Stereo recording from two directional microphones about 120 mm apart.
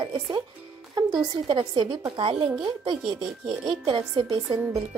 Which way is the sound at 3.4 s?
Centre (ahead or behind).